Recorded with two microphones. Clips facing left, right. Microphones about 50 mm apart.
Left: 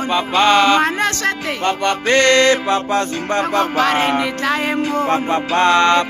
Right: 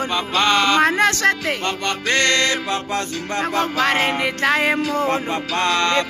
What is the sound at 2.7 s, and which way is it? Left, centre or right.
Music, left.